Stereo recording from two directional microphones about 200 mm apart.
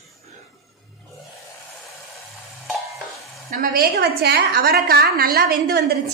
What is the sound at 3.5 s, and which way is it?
A woman's voice, 50° right (ahead or behind).